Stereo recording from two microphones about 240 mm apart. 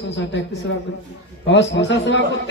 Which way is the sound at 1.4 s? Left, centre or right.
Left.